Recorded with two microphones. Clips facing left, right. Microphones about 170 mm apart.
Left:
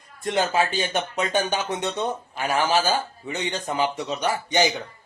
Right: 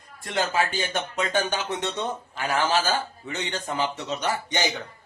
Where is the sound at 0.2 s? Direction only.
20° left (ahead or behind).